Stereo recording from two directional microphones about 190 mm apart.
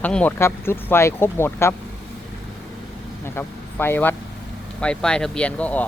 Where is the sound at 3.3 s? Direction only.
10° left (ahead or behind).